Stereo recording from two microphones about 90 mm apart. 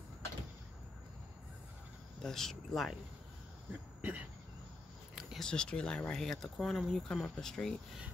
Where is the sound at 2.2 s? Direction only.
5° left (ahead or behind).